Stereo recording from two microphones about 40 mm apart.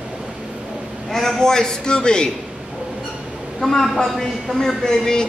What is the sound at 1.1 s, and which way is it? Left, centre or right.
A man's voice, centre.